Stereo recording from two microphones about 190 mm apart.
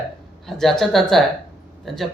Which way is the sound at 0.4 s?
Centre (ahead or behind).